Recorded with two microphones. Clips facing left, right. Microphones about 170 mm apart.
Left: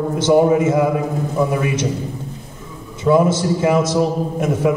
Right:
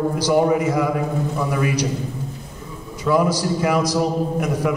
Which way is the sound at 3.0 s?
25° left (ahead or behind).